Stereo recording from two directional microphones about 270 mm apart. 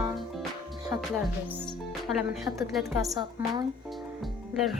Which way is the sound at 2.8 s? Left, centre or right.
Centre.